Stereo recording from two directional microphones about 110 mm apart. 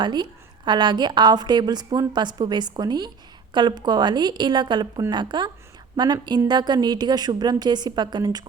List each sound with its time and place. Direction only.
0.0 s a woman's voice: 40° right (ahead or behind)